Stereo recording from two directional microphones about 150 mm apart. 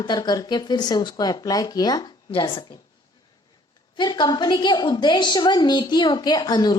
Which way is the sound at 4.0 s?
30° left (ahead or behind).